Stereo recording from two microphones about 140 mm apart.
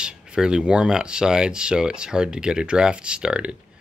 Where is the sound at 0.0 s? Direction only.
5° right (ahead or behind).